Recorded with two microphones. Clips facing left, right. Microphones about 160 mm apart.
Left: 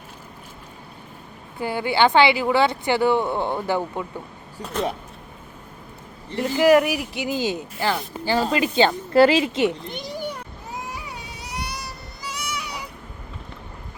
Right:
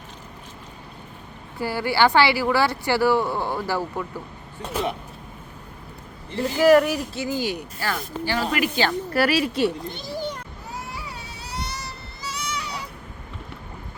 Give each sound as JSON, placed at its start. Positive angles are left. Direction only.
{"t": 1.5, "sound": "speech", "side_deg": 20}
{"t": 4.6, "sound": "speech", "side_deg": 0}
{"t": 6.7, "sound": "speech", "side_deg": 10}
{"t": 10.9, "sound": "a sound", "side_deg": 15}